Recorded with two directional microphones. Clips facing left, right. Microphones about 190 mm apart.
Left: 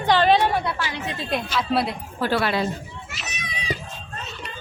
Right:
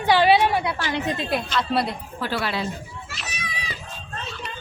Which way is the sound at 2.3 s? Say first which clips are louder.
Left 4 dB; 55° left (ahead or behind).